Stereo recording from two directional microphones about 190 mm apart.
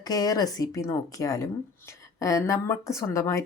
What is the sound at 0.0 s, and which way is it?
A woman's voice, 20° left (ahead or behind).